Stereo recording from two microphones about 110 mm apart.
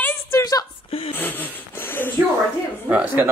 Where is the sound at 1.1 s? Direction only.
15° left (ahead or behind).